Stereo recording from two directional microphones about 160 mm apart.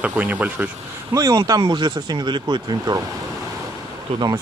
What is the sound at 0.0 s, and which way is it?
Speech, 10° right (ahead or behind).